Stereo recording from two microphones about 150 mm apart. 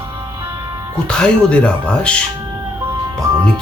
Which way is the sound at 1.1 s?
5° left (ahead or behind).